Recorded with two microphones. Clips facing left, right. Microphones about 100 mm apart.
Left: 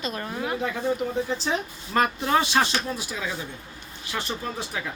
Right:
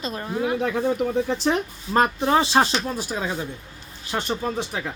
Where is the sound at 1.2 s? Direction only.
55° right (ahead or behind).